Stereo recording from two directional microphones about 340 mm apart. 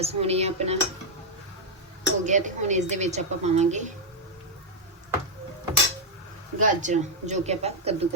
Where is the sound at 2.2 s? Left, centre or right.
Right.